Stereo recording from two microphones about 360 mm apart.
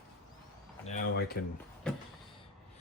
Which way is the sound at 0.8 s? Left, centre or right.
Left.